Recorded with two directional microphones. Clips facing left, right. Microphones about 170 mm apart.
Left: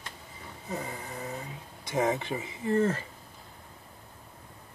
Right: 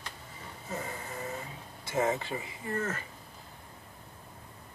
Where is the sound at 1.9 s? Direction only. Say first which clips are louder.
Left 2 dB; 15° left (ahead or behind).